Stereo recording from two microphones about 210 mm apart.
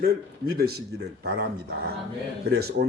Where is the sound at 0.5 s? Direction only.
45° right (ahead or behind).